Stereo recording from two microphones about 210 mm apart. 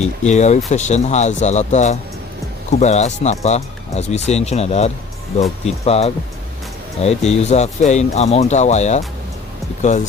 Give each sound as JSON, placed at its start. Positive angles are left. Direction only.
{"t": 0.0, "sound": "speech", "side_deg": 35}